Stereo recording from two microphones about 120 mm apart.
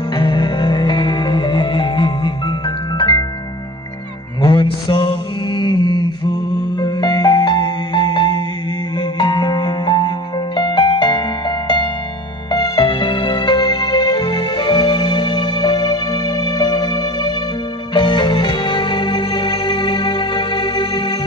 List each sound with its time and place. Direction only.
0.1 s music: 40° left (ahead or behind)
4.4 s mantra: 40° left (ahead or behind)
9.2 s music: 40° left (ahead or behind)